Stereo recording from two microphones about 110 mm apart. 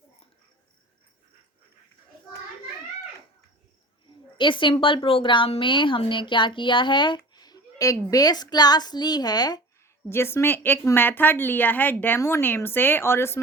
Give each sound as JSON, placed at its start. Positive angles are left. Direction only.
{"t": 4.4, "sound": "a woman's voice", "side_deg": 50}
{"t": 10.1, "sound": "speech", "side_deg": 25}